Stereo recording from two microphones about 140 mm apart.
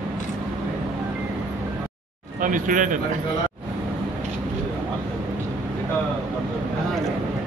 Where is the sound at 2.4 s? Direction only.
70° right (ahead or behind).